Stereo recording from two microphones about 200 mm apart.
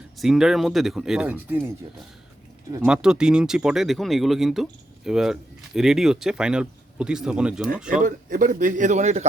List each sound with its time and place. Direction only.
0.2 s speech: centre (ahead or behind)
2.8 s speech: 5° right (ahead or behind)
7.9 s a man's voice: 40° right (ahead or behind)